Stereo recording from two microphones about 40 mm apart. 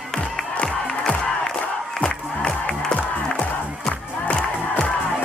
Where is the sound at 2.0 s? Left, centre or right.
Centre.